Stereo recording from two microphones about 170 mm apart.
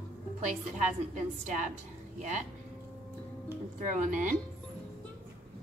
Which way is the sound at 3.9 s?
50° right (ahead or behind).